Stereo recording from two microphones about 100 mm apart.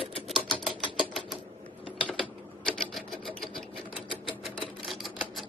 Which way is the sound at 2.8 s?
Centre (ahead or behind).